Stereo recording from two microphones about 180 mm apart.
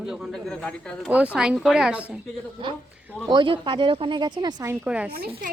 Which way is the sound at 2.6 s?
30° right (ahead or behind).